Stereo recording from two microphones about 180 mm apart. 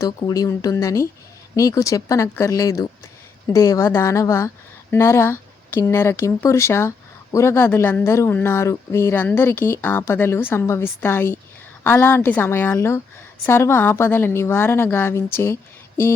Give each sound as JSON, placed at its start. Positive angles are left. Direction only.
{"t": 0.0, "sound": "a woman's voice", "side_deg": 20}